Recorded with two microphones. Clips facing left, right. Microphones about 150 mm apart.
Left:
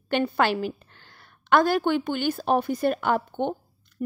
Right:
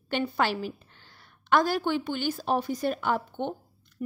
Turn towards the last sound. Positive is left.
turn(degrees=55)  # may be behind; listen again after turning